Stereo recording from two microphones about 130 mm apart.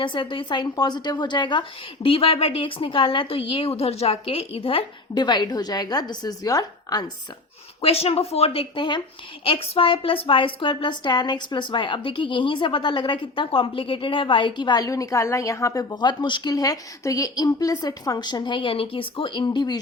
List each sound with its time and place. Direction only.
0.0 s a woman's voice: 40° left (ahead or behind)
7.8 s a woman's voice: 50° left (ahead or behind); by 19.8 s 30° left (ahead or behind)